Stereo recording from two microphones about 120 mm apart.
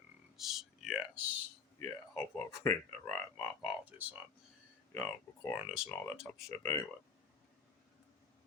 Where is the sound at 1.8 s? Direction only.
25° left (ahead or behind).